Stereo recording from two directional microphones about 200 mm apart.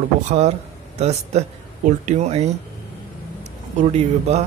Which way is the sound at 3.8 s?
30° right (ahead or behind).